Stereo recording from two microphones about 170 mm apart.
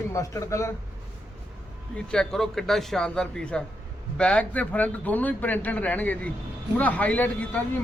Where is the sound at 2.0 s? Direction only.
5° left (ahead or behind).